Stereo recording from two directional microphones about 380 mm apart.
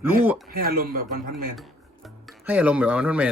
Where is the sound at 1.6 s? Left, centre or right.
Centre.